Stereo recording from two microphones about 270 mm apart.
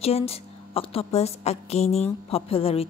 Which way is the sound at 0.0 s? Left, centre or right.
Left.